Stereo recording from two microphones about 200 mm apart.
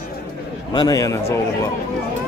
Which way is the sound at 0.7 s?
15° left (ahead or behind).